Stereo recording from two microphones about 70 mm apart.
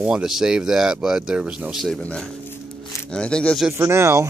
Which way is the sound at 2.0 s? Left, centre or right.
Centre.